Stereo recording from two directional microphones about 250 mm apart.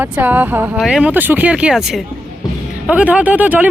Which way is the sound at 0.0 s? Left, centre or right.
Centre.